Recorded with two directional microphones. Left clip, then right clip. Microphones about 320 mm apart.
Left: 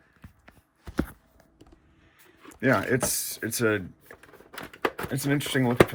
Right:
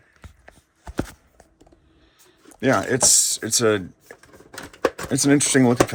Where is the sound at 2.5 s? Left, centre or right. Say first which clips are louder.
Right 4 dB; centre.